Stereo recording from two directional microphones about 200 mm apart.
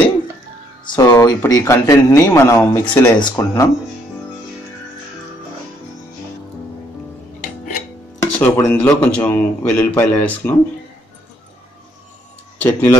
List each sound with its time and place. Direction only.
0.9 s speech: 20° left (ahead or behind)
3.2 s speech: 20° left (ahead or behind)
8.2 s speech: 10° left (ahead or behind)
12.5 s speech: 15° left (ahead or behind)